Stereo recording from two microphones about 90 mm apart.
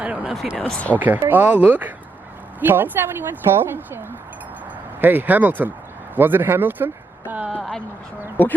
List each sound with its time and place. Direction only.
0.0 s speech: 15° right (ahead or behind)
0.5 s speech: 15° left (ahead or behind)
0.9 s speech: 20° right (ahead or behind)
8.4 s speech: 20° left (ahead or behind)